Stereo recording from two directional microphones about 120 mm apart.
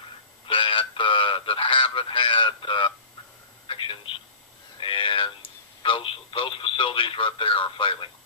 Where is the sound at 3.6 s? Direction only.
45° left (ahead or behind).